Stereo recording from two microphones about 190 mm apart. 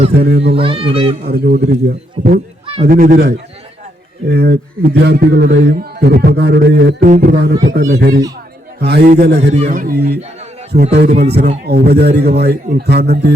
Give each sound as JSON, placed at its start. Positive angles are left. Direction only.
{"t": 0.1, "sound": "speech", "side_deg": -60}
{"t": 0.5, "sound": "speech", "side_deg": -30}
{"t": 1.3, "sound": "a man's voice", "side_deg": -50}
{"t": 7.6, "sound": "speech", "side_deg": -65}
{"t": 9.5, "sound": "a man's voice", "side_deg": -35}
{"t": 10.7, "sound": "speech", "side_deg": -35}
{"t": 11.6, "sound": "speech", "side_deg": -60}